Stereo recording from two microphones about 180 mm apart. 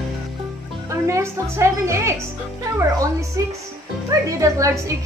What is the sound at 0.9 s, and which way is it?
Speech, 15° right (ahead or behind).